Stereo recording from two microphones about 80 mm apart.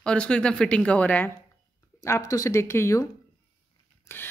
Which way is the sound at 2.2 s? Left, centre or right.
Left.